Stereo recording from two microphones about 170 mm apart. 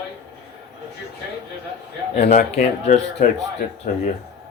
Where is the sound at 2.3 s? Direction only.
55° left (ahead or behind).